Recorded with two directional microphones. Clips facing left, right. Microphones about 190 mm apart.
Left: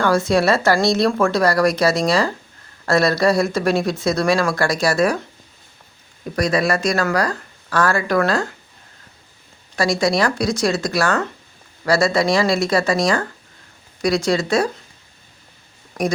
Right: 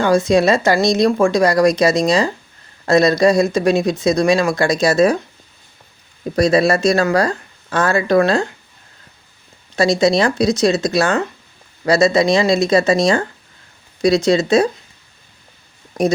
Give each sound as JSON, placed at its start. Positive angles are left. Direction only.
{"t": 0.0, "sound": "a woman's voice", "side_deg": -15}
{"t": 6.3, "sound": "speech", "side_deg": -25}
{"t": 9.7, "sound": "speech", "side_deg": -25}